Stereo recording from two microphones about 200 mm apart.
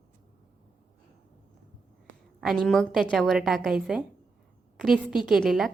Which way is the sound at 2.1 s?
70° right (ahead or behind).